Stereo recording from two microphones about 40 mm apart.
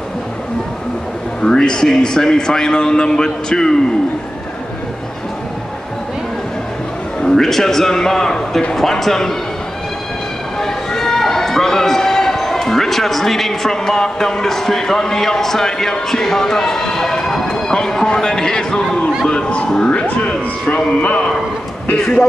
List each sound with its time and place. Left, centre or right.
1.4 s a man's voice: centre
7.2 s a man's voice: centre
10.6 s a man's voice: centre; by 21.3 s left